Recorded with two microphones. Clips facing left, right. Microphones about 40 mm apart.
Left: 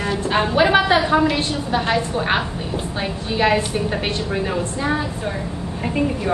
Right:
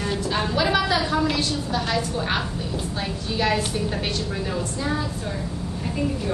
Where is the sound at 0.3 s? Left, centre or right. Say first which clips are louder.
Left 7 dB; left.